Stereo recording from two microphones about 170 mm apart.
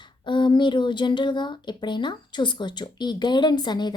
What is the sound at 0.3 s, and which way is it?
Speech, 30° left (ahead or behind).